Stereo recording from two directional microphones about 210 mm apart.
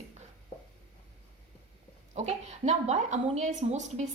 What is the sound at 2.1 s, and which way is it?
A woman's voice, 30° right (ahead or behind).